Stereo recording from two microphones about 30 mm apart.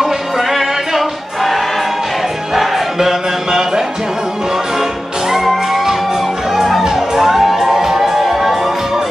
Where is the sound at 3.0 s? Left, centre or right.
Centre.